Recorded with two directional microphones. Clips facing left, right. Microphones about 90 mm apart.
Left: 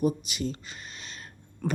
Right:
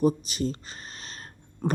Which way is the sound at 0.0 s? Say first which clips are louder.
Right 3 dB; 35° right (ahead or behind).